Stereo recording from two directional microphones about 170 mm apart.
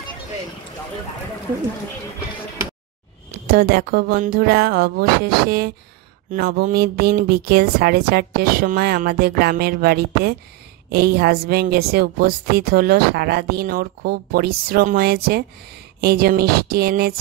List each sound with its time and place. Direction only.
3.4 s speech: 65° right (ahead or behind)